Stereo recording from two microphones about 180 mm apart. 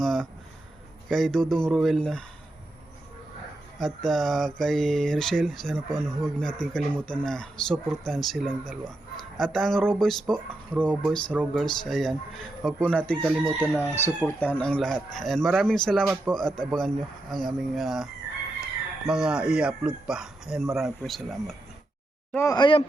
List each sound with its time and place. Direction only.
0.0 s a sound: centre (ahead or behind)
1.0 s speech: centre (ahead or behind)
3.8 s speech: centre (ahead or behind)
22.4 s a man's voice: 25° left (ahead or behind)